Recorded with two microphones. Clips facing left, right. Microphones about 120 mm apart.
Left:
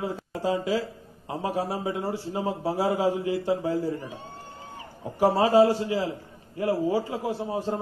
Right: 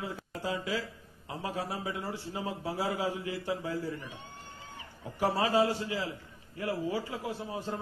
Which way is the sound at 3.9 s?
30° left (ahead or behind).